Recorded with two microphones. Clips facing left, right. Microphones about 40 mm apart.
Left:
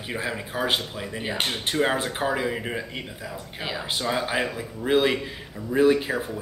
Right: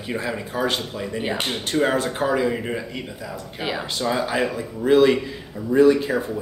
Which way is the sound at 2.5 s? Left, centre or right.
Centre.